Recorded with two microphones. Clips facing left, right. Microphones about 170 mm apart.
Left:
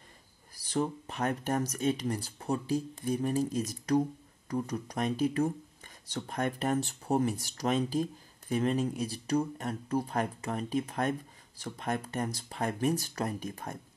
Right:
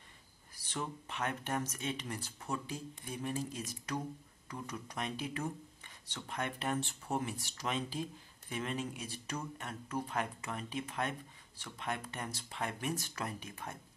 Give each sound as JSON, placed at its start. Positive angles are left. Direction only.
{"t": 0.6, "sound": "speech", "side_deg": 35}